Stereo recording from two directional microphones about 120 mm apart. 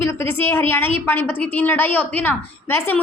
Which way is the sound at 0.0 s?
20° left (ahead or behind).